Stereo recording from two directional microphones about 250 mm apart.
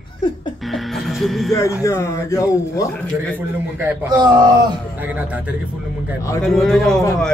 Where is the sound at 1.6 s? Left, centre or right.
Centre.